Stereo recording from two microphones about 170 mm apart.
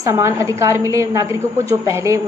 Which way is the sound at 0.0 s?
20° right (ahead or behind).